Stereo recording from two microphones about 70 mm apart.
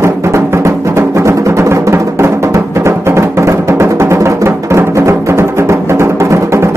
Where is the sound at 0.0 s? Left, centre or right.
Right.